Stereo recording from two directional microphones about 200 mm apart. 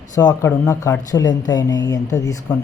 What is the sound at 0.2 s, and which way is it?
Speech, 20° left (ahead or behind).